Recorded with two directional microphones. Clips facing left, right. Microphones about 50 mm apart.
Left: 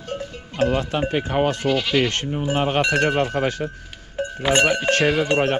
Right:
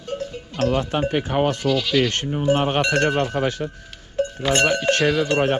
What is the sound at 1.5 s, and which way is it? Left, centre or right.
Speech, left.